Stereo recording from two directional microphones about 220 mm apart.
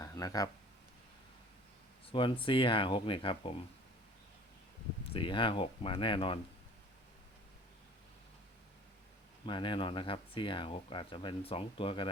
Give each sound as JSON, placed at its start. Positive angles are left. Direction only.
{"t": 0.0, "sound": "a sound", "side_deg": 15}
{"t": 2.1, "sound": "speech", "side_deg": 25}
{"t": 5.1, "sound": "speech", "side_deg": 25}
{"t": 9.5, "sound": "speech", "side_deg": 20}